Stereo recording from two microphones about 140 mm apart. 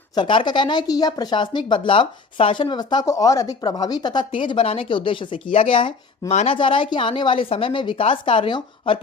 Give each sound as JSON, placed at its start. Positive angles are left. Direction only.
{"t": 0.2, "sound": "speech", "side_deg": 35}